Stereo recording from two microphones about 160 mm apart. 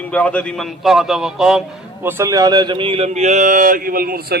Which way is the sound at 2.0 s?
15° right (ahead or behind).